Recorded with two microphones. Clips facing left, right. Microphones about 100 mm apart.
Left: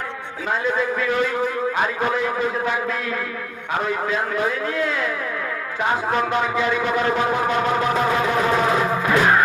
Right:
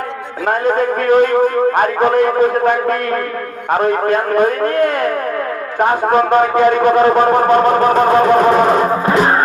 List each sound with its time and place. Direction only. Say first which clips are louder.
0.4 s a man's voice: right 8 dB; 55° right (ahead or behind); by 9.4 s 35° right (ahead or behind)